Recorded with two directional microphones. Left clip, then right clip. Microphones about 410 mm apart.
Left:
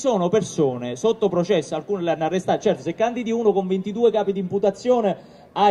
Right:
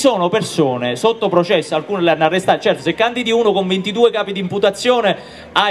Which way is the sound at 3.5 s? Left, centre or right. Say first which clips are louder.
Right 7 dB; right.